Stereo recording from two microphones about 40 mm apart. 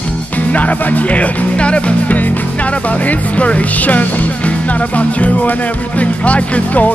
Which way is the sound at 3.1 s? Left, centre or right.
Left.